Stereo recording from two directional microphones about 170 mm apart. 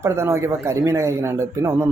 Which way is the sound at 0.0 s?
15° right (ahead or behind).